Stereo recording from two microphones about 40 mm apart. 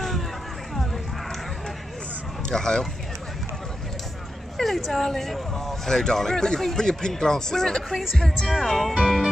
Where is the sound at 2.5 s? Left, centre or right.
Centre.